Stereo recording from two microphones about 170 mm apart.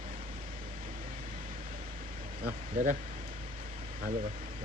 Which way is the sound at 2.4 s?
50° right (ahead or behind).